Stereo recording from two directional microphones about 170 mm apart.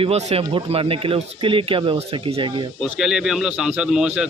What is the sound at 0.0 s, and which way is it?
Speech, 40° right (ahead or behind).